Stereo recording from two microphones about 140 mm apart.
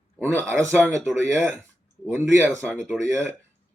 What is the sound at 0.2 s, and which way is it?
Speech, 20° right (ahead or behind).